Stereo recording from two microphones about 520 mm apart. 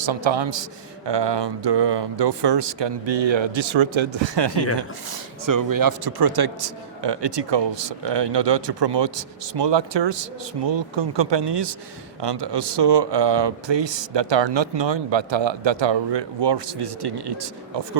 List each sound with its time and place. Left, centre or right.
0.0 s a man's voice: right
4.8 s speech: right